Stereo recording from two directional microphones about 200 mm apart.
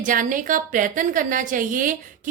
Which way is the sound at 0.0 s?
40° right (ahead or behind).